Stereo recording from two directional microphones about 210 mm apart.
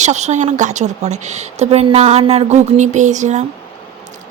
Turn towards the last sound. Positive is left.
turn(degrees=-35)  # may be behind; listen again after turning